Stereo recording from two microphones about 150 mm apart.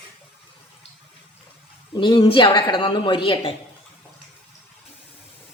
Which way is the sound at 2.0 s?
30° left (ahead or behind).